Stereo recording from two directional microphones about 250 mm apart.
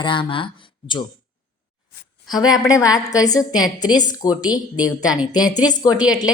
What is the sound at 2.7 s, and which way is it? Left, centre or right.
A woman's voice, centre.